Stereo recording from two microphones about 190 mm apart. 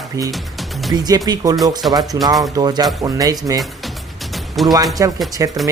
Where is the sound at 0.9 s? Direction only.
20° right (ahead or behind).